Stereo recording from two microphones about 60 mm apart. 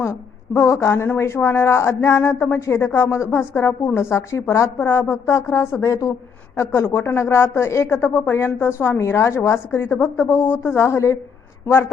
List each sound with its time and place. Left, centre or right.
0.5 s a woman's voice: left
6.7 s speech: left